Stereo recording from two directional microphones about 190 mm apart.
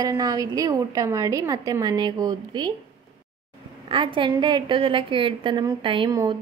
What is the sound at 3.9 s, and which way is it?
A woman's voice, 25° right (ahead or behind).